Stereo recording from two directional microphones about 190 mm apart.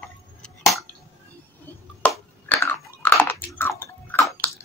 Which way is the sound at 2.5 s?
10° left (ahead or behind).